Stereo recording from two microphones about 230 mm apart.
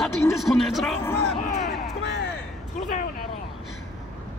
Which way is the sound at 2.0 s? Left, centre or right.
Left.